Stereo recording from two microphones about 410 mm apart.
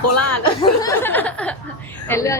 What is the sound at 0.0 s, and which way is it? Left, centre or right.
Speech, left.